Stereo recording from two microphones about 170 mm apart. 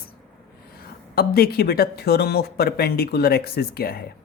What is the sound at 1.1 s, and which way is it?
Speech, 65° left (ahead or behind).